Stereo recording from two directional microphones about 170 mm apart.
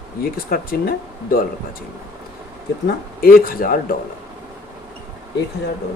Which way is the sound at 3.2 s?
60° left (ahead or behind).